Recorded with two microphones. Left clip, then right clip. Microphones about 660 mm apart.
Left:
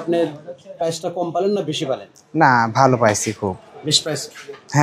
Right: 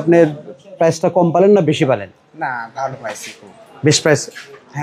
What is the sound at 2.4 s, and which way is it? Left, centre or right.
Speech, left.